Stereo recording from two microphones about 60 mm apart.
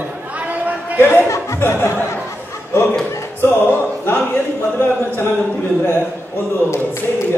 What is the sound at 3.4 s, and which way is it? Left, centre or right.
Speech, left.